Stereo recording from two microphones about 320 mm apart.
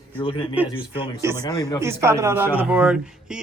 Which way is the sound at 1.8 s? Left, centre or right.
Centre.